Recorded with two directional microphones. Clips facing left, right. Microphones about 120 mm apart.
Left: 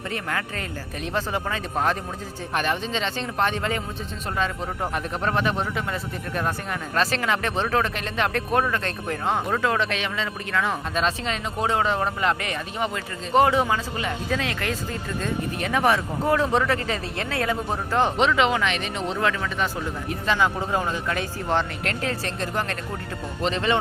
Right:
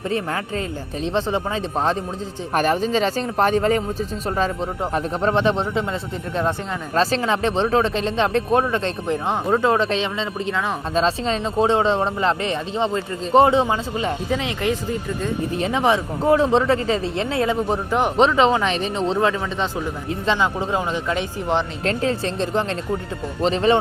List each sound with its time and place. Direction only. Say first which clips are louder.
0.1 s speech: right 5 dB; 30° right (ahead or behind)
2.5 s speech: right 7 dB; 40° right (ahead or behind)
4.9 s speech: right 6 dB; 30° right (ahead or behind)
10.9 s speech: right 10 dB; 30° right (ahead or behind)
18.2 s speech: right 5 dB; 35° right (ahead or behind)